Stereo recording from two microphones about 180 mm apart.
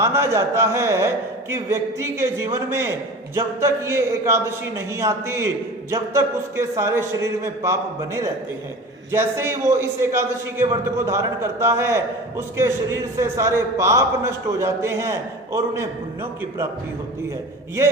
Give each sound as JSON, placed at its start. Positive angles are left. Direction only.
{"t": 0.0, "sound": "a man's voice", "side_deg": -15}